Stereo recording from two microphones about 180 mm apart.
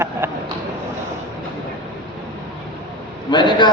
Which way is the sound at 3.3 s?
25° left (ahead or behind).